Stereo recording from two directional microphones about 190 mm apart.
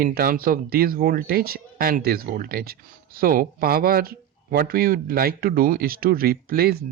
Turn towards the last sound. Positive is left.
turn(degrees=-55)  # may be behind; listen again after turning